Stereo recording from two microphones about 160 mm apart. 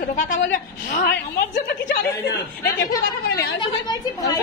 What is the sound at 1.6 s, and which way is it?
Speech, 80° left.